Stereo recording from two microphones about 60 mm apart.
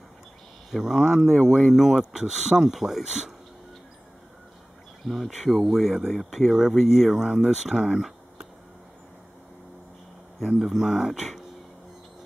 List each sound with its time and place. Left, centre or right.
0.7 s speech: centre
5.0 s speech: centre
10.6 s speech: centre